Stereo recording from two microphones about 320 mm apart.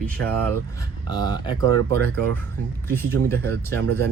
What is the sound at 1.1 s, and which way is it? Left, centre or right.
Speech, centre.